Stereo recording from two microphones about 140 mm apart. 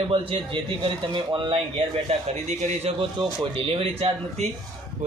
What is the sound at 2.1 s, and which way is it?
Speech, 50° right (ahead or behind).